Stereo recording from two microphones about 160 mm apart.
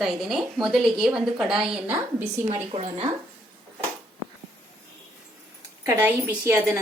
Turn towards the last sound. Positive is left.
turn(degrees=-15)  # may be behind; listen again after turning